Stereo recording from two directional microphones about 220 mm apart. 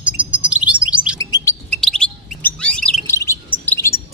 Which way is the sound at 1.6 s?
5° left (ahead or behind).